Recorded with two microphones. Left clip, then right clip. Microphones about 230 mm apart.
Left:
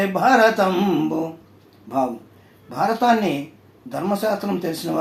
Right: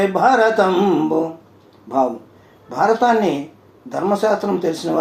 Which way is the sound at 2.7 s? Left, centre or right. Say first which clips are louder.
Right 3 dB; left.